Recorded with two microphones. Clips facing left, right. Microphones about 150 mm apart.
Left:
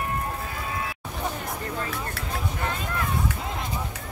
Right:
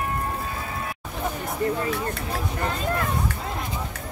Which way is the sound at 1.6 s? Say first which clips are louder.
Right 9 dB; 10° right (ahead or behind).